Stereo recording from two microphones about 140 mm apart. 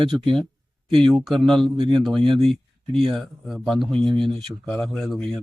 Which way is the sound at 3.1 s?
Centre (ahead or behind).